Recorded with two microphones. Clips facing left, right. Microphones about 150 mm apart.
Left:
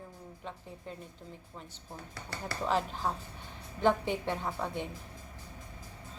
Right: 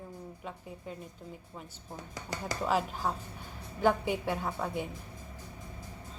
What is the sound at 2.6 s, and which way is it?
A woman's voice, 5° right (ahead or behind).